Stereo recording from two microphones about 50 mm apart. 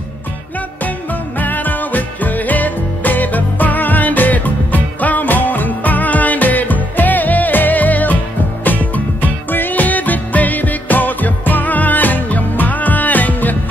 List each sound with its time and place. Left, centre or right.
1.4 s music: left